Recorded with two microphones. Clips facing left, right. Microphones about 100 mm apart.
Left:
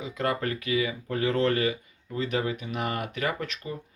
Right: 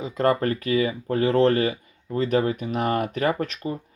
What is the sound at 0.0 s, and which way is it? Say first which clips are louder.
Speech: right 7 dB; 40° right (ahead or behind).